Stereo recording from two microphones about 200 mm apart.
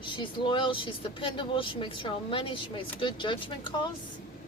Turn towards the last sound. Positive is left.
turn(degrees=25)  # may be behind; listen again after turning